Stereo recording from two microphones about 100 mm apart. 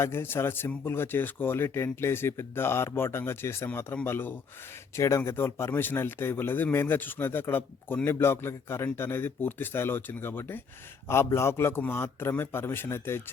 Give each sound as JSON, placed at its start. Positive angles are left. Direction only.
{"t": 0.0, "sound": "speech", "side_deg": 25}